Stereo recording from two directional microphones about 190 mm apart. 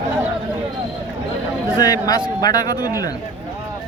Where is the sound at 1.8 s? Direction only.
20° left (ahead or behind).